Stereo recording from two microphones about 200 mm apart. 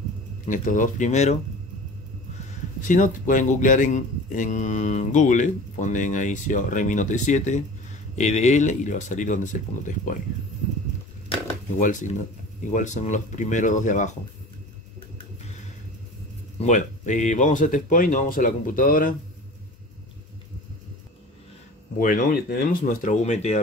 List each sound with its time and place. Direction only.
0.5 s speech: 40° left (ahead or behind)
2.8 s speech: 40° left (ahead or behind)
11.8 s speech: 40° left (ahead or behind)
16.5 s speech: 40° left (ahead or behind)
21.9 s speech: 45° left (ahead or behind)